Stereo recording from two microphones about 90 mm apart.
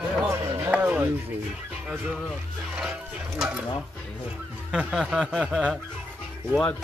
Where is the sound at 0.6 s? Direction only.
20° right (ahead or behind).